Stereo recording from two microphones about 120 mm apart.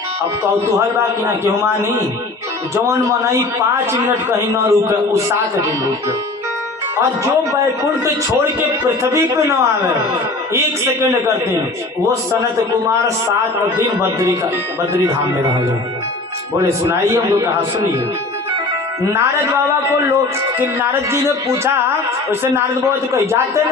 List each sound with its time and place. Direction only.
0.2 s a man's voice: 25° right (ahead or behind)
8.0 s a man's voice: 20° right (ahead or behind)
13.7 s a man's voice: 20° right (ahead or behind)
16.6 s a man's voice: 25° right (ahead or behind)
19.1 s a man's voice: 25° right (ahead or behind)